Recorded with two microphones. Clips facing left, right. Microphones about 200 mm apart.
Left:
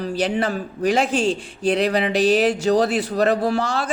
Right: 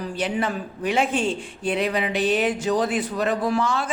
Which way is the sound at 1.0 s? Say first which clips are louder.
Left 3 dB; 90° left.